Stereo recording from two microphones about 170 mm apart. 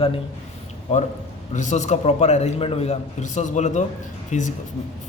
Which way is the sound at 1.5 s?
45° left (ahead or behind).